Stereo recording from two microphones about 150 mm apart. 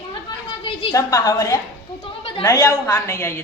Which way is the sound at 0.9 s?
20° left (ahead or behind).